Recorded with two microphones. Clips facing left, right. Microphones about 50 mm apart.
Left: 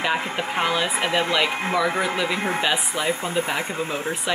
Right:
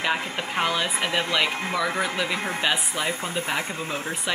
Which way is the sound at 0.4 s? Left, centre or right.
Centre.